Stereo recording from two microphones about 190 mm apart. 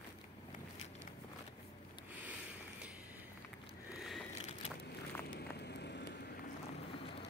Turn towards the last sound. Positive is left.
turn(degrees=60)  # may be behind; listen again after turning